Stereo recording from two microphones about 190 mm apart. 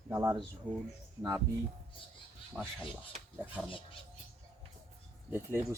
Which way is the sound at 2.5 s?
5° right (ahead or behind).